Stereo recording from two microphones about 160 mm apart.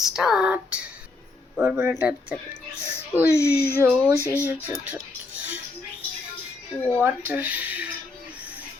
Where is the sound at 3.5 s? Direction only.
80° left.